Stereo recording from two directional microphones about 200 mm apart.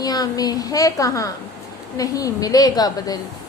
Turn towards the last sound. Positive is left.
turn(degrees=20)  # may be behind; listen again after turning